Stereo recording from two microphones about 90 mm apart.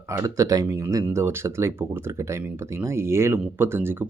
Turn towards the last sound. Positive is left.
turn(degrees=-25)  # may be behind; listen again after turning